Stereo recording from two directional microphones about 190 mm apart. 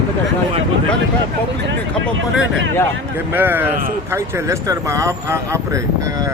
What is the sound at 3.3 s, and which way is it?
Speech, 10° right (ahead or behind).